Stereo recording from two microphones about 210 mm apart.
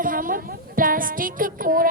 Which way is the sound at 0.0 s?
40° right (ahead or behind).